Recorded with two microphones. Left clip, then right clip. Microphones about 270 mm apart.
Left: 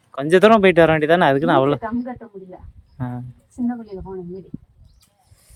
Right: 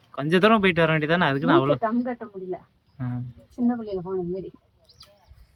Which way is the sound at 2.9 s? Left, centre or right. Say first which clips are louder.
Left 4 dB; left.